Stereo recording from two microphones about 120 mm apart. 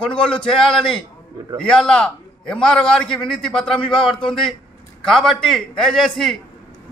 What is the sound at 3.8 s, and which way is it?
Speech, 45° left (ahead or behind).